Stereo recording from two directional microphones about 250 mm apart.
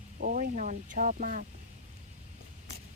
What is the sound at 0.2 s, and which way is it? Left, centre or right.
Speech, right.